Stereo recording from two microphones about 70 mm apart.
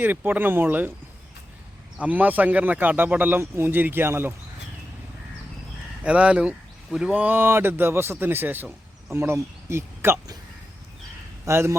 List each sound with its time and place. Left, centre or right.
0.0 s speech: right
2.0 s speech: right
3.4 s speech: right
6.0 s speech: centre
7.1 s speech: right
11.4 s speech: right